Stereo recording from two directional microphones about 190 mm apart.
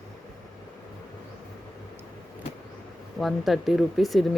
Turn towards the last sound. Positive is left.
turn(degrees=0)  # may be behind; listen again after turning